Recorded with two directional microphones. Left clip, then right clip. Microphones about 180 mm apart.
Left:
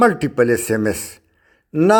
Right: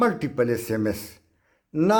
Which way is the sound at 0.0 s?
30° left (ahead or behind).